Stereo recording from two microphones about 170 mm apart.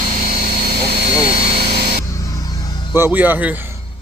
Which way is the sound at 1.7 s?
70° right (ahead or behind).